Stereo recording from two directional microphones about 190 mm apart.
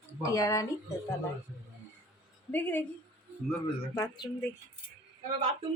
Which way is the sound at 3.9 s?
15° left (ahead or behind).